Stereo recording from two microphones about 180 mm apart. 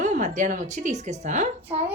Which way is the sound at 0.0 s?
45° right (ahead or behind).